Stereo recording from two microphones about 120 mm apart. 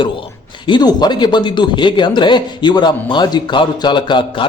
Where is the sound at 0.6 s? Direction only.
40° left (ahead or behind).